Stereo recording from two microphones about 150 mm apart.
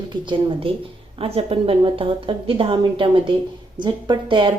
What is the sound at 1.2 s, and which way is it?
A woman's voice, 40° right (ahead or behind).